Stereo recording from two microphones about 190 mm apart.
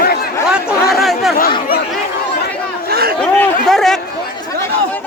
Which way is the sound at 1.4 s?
50° left (ahead or behind).